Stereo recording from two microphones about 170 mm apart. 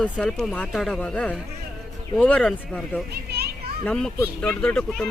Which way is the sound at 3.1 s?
65° right (ahead or behind).